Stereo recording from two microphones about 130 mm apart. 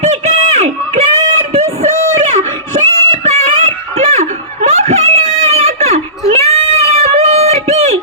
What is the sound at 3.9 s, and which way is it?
Snicker, 55° right (ahead or behind).